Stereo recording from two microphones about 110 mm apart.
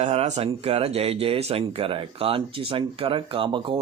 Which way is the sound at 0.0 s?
70° right (ahead or behind).